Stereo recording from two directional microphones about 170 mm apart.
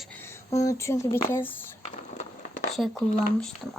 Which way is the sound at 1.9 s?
40° left (ahead or behind).